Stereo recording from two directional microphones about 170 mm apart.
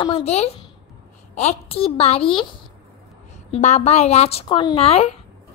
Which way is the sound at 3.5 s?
40° left (ahead or behind).